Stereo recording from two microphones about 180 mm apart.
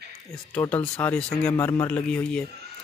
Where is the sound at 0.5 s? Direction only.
10° left (ahead or behind).